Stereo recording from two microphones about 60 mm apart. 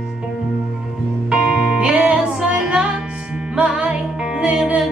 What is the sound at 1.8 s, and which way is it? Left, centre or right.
Music, centre.